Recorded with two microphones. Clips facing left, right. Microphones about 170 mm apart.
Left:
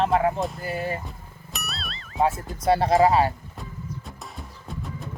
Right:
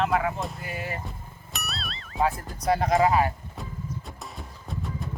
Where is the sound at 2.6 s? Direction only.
30° left (ahead or behind).